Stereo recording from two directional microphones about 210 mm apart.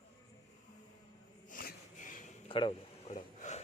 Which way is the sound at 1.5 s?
40° left (ahead or behind).